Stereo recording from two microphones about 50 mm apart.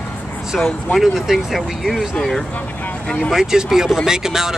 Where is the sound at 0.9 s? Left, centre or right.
Centre.